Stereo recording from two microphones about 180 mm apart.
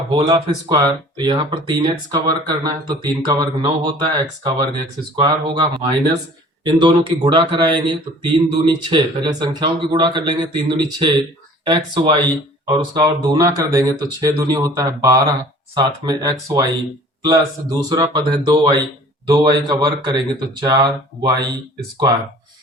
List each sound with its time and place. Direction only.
0.1 s speech: 30° right (ahead or behind)